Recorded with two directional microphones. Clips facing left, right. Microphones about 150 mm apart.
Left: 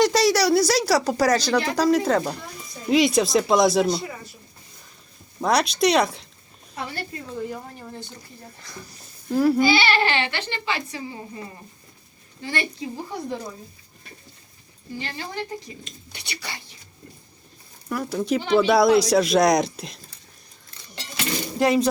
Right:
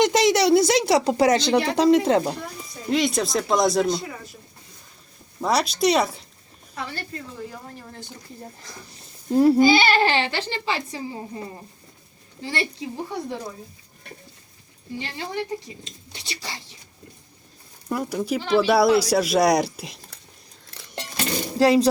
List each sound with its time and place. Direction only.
0.0 s speech: 20° right (ahead or behind)
2.9 s speech: centre (ahead or behind)
5.4 s speech: centre (ahead or behind)
8.9 s a sound: 25° right (ahead or behind)
9.6 s a woman's voice: 45° right (ahead or behind); by 12.6 s 30° right (ahead or behind)
14.9 s speech: 20° right (ahead or behind)
16.1 s speech: 30° right (ahead or behind)
17.8 s speech: 20° right (ahead or behind)
18.2 s speech: 5° right (ahead or behind)
20.7 s music: 80° right
21.2 s speech: 35° right (ahead or behind)